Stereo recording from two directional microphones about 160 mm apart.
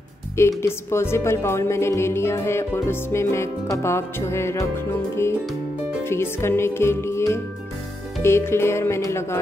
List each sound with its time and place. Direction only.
0.4 s speech: 15° left (ahead or behind)
6.0 s speech: 15° left (ahead or behind)